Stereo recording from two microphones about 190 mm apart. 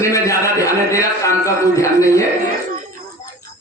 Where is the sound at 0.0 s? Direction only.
15° left (ahead or behind).